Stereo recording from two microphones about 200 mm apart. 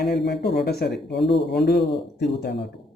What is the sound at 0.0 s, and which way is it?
Speech, 55° left (ahead or behind).